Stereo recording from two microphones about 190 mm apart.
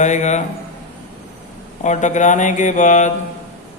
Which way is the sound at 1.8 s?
40° left (ahead or behind).